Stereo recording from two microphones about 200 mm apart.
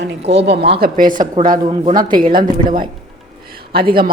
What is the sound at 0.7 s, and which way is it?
Speech, 45° right (ahead or behind).